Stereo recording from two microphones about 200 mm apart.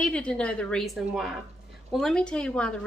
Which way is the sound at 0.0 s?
5° left (ahead or behind).